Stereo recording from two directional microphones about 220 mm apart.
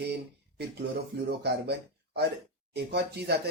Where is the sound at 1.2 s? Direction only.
50° right (ahead or behind).